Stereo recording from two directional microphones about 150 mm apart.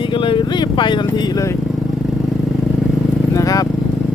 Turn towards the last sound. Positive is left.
turn(degrees=25)  # may be behind; listen again after turning